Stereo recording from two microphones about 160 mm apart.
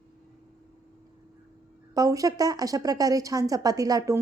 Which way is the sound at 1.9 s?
20° right (ahead or behind).